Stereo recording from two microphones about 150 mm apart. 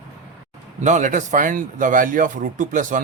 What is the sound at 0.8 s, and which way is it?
Speech, 55° right (ahead or behind).